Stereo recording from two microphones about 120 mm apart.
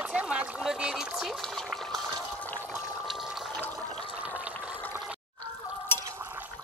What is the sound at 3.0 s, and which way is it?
Water, centre (ahead or behind).